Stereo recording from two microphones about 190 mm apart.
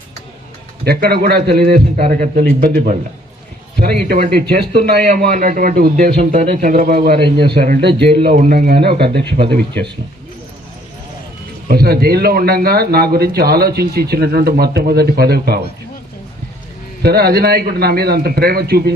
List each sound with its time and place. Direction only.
0.9 s a man's voice: 55° right (ahead or behind)
8.1 s speech: 30° right (ahead or behind)
8.4 s a man's voice: 50° right (ahead or behind)
11.7 s a man's voice: 55° right (ahead or behind)
17.0 s a man's voice: 55° right (ahead or behind)